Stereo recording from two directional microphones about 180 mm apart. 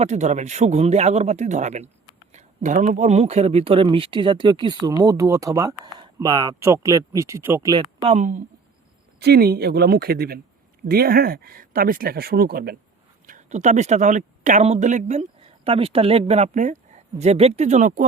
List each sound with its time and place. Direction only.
0.0 s speech: 40° right (ahead or behind); by 7.9 s 20° right (ahead or behind)
8.0 s speech: 40° right (ahead or behind)
9.2 s speech: 60° right (ahead or behind)
13.2 s speech: 45° right (ahead or behind)